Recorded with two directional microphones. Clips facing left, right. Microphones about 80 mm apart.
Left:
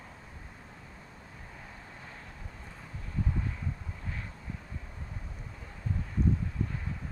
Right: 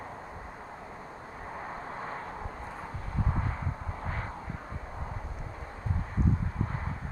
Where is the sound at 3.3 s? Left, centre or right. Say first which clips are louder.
Right 3 dB; right.